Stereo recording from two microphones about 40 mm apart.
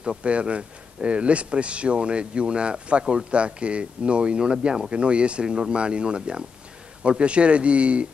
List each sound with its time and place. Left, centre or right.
0.2 s speech: right